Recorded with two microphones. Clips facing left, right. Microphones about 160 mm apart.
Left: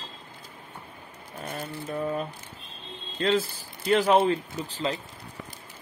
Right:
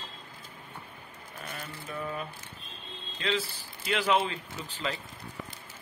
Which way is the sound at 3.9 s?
40° left (ahead or behind).